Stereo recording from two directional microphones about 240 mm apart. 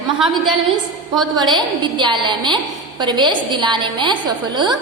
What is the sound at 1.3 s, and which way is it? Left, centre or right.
A woman's voice, centre.